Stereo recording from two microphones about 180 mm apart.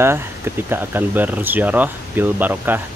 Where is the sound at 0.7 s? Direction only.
10° right (ahead or behind).